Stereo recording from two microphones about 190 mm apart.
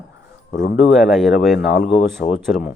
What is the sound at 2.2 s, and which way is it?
Speech, 45° left (ahead or behind).